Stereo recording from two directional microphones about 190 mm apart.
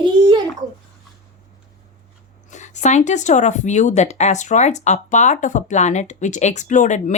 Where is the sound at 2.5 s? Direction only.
40° left (ahead or behind).